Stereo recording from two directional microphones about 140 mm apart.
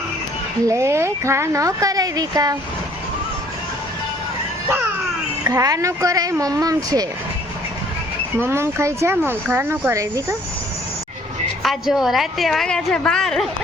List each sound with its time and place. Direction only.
0.7 s speech: 20° right (ahead or behind)
5.5 s speech: 25° right (ahead or behind)
8.4 s speech: 20° right (ahead or behind)
11.6 s a woman's voice: centre (ahead or behind)